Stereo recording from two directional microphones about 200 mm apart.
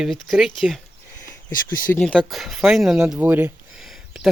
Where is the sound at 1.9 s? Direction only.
5° left (ahead or behind).